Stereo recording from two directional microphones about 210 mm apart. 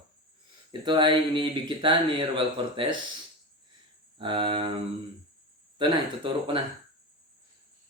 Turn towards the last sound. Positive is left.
turn(degrees=-25)  # may be behind; listen again after turning